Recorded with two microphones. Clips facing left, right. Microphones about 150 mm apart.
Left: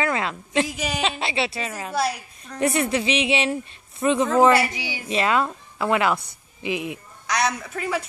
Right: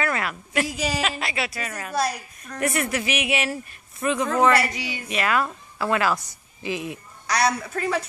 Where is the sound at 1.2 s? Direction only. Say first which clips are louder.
Left 3 dB; 25° left (ahead or behind).